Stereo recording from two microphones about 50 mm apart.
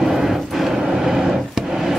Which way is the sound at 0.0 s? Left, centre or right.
Centre.